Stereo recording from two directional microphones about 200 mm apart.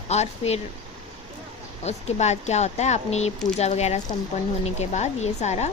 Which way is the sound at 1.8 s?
35° left (ahead or behind).